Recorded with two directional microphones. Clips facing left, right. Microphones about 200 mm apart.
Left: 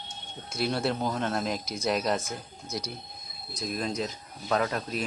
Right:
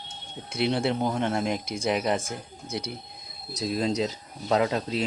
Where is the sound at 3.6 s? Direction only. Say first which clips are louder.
Right 5 dB; 25° right (ahead or behind).